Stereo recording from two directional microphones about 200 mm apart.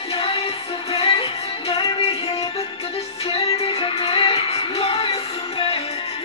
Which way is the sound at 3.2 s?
30° left (ahead or behind).